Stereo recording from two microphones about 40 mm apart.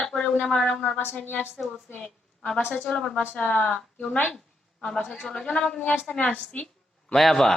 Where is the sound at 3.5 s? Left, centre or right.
Left.